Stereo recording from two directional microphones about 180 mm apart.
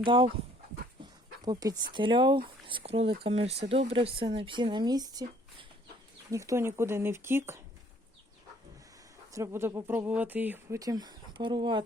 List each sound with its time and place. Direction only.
0.0 s a woman's voice: 25° right (ahead or behind)
1.5 s a woman's voice: 20° right (ahead or behind)
6.3 s speech: 15° right (ahead or behind)
9.3 s speech: 15° right (ahead or behind)